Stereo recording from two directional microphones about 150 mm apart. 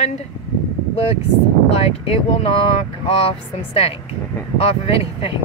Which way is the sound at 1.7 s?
40° left (ahead or behind).